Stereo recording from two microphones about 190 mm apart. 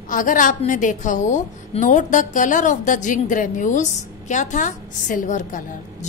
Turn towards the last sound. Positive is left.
turn(degrees=40)  # may be behind; listen again after turning